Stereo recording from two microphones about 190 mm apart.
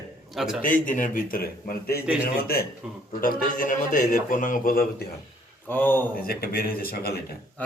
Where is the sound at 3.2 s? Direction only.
45° left (ahead or behind).